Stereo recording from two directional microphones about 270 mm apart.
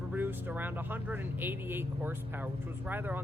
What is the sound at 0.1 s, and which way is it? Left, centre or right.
Speech, centre.